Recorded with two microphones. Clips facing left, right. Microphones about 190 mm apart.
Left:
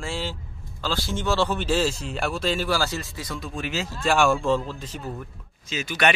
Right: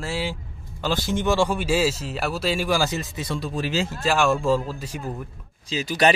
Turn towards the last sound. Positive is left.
turn(degrees=-35)  # may be behind; listen again after turning